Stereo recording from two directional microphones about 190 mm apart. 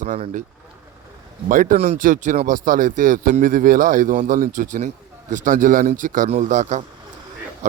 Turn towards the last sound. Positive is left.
turn(degrees=-40)  # may be behind; listen again after turning